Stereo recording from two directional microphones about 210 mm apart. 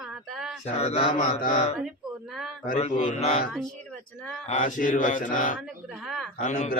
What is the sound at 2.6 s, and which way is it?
Speech, 35° left (ahead or behind).